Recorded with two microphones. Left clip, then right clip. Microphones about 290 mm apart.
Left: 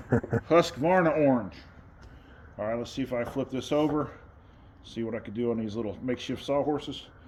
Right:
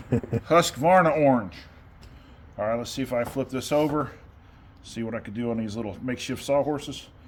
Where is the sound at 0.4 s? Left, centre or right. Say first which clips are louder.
Right 4 dB; right.